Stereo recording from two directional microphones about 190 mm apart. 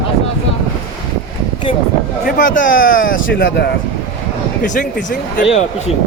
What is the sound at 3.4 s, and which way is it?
Speech, 75° left (ahead or behind).